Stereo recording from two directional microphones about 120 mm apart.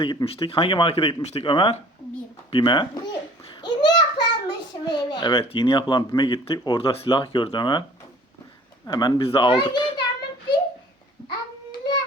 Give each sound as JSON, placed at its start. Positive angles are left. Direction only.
{"t": 0.0, "sound": "speech", "side_deg": 45}
{"t": 3.6, "sound": "a sound", "side_deg": 40}
{"t": 5.5, "sound": "speech", "side_deg": 40}
{"t": 8.9, "sound": "a child's voice", "side_deg": 35}
{"t": 11.3, "sound": "hands", "side_deg": 35}